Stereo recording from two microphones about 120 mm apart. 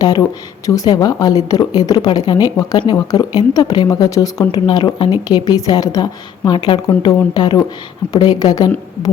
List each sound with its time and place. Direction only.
0.0 s speech: 30° left (ahead or behind)